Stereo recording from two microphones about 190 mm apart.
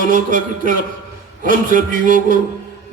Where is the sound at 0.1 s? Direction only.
45° right (ahead or behind).